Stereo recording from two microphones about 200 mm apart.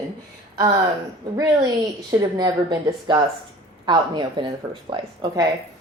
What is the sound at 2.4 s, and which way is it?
A woman's voice, 20° right (ahead or behind).